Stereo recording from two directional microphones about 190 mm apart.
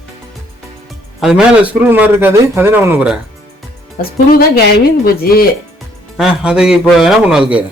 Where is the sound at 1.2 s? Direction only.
5° right (ahead or behind).